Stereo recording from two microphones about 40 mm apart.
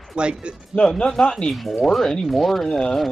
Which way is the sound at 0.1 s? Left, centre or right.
Right.